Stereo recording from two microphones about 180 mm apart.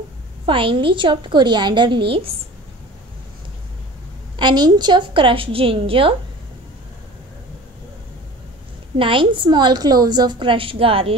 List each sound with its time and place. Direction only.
0.5 s a woman's voice: 30° right (ahead or behind)
4.4 s a woman's voice: 25° right (ahead or behind)
8.9 s a woman's voice: 30° right (ahead or behind)